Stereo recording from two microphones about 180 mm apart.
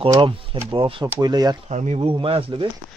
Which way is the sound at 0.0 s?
30° right (ahead or behind).